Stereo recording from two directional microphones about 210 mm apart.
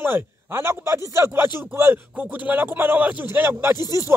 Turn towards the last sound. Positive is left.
turn(degrees=-10)  # may be behind; listen again after turning